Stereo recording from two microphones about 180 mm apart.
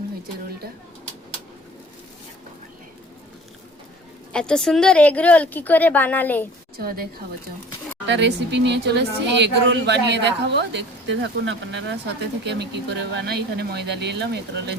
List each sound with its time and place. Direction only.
4.3 s a woman's voice: 5° left (ahead or behind)
6.7 s speech: 55° right (ahead or behind)
8.0 s speech: 80° right